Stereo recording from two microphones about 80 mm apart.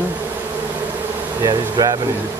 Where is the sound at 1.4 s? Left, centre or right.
Right.